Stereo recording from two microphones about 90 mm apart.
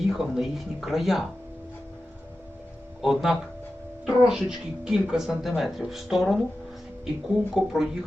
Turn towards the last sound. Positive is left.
turn(degrees=-5)  # may be behind; listen again after turning